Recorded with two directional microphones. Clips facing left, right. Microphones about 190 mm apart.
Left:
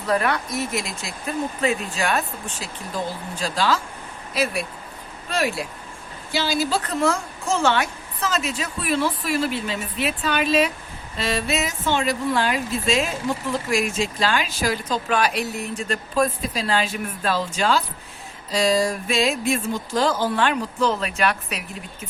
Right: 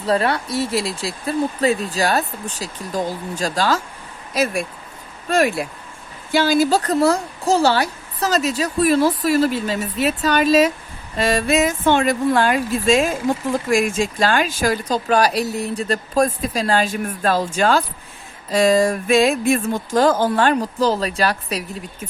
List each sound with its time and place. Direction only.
0.0 s a woman's voice: 30° right (ahead or behind)